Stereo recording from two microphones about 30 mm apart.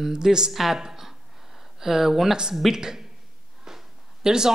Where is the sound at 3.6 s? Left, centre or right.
Centre.